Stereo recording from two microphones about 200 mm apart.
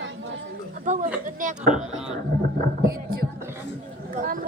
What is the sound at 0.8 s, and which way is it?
Speech, 40° right (ahead or behind).